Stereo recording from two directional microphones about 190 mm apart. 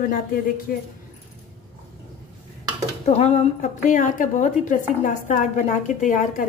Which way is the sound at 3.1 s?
35° left (ahead or behind).